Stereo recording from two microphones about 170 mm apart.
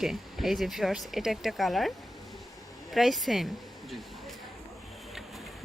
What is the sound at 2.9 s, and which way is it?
Speech, centre (ahead or behind).